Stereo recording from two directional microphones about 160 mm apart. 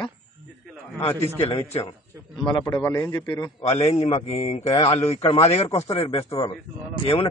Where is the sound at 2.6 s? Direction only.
15° left (ahead or behind).